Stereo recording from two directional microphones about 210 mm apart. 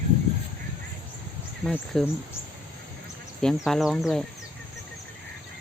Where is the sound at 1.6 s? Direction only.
Centre (ahead or behind).